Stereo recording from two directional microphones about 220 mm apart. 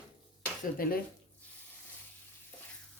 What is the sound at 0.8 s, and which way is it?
Speech, 40° left (ahead or behind).